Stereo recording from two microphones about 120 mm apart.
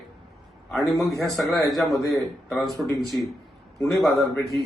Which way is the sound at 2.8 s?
10° right (ahead or behind).